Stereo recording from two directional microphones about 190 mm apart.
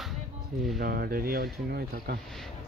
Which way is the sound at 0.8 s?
55° right (ahead or behind).